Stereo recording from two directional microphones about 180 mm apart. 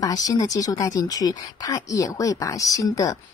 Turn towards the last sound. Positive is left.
turn(degrees=20)  # may be behind; listen again after turning